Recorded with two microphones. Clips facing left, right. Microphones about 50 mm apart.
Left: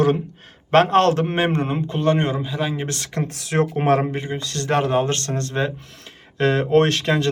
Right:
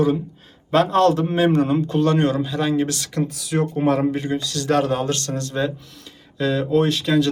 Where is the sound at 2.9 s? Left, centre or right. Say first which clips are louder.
Right 2 dB; left.